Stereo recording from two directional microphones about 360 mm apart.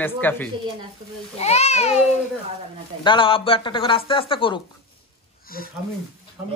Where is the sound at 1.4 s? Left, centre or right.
Centre.